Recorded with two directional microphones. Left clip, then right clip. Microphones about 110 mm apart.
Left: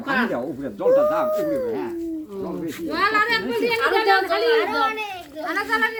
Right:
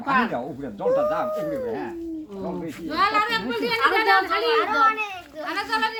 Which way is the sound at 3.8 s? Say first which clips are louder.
Right 1 dB; 10° left (ahead or behind).